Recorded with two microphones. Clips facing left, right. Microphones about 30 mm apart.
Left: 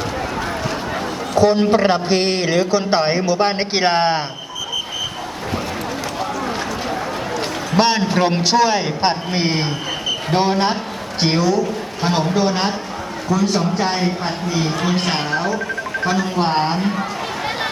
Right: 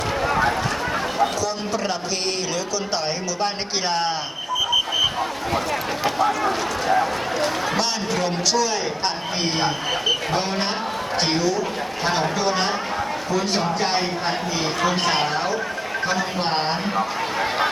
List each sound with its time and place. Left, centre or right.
1.4 s speech: left
7.8 s speech: left
10.3 s speech: left
12.3 s speech: left
13.3 s a man's voice: right
14.3 s speech: centre
14.8 s speech: centre